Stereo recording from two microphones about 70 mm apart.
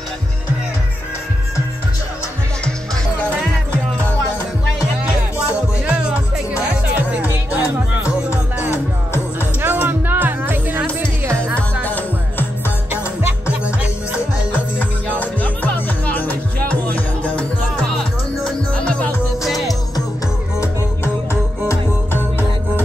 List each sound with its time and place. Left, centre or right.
5.9 s music: centre
8.6 s music: left
9.6 s music: right
11.0 s music: right
11.8 s music: left
14.8 s music: left
17.8 s music: centre
18.9 s music: centre
20.6 s music: left